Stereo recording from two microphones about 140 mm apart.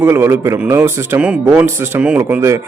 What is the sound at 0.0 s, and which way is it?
A man's voice, 15° right (ahead or behind).